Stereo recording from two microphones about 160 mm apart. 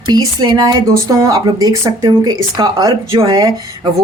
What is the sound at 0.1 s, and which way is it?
Speech, 25° right (ahead or behind).